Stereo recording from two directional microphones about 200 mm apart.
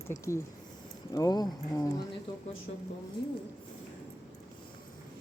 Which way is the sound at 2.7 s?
35° left (ahead or behind).